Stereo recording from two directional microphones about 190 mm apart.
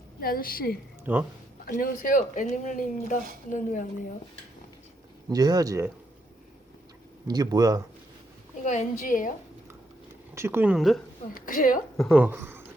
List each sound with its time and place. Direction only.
0.2 s speech: 50° left (ahead or behind)
1.1 s speech: 10° right (ahead or behind)
1.6 s speech: 50° left (ahead or behind)
5.3 s speech: 20° right (ahead or behind)
7.3 s speech: 20° right (ahead or behind)
8.6 s speech: 40° left (ahead or behind)
10.3 s speech: 15° right (ahead or behind)
11.3 s speech: 45° left (ahead or behind)
11.9 s a woman's voice: 5° right (ahead or behind)